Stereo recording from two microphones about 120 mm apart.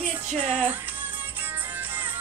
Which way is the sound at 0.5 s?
15° right (ahead or behind).